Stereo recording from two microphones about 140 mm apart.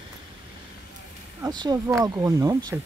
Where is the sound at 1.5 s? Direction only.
30° right (ahead or behind).